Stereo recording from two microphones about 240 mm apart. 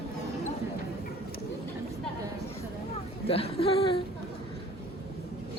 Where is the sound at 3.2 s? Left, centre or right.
Left.